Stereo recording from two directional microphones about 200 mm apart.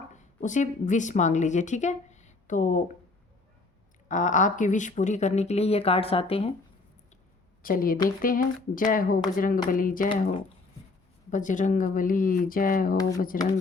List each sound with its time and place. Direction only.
0.1 s a woman's voice: 40° left (ahead or behind)
4.1 s speech: 40° left (ahead or behind)
7.6 s speech: 45° left (ahead or behind)
11.3 s speech: 40° left (ahead or behind)
13.0 s speech: 15° left (ahead or behind)